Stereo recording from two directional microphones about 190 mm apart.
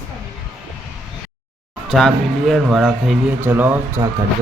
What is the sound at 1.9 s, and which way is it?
Speech, centre (ahead or behind).